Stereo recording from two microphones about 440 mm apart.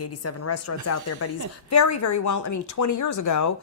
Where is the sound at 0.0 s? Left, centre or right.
Left.